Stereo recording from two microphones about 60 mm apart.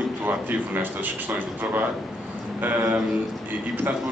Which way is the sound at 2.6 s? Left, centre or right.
Right.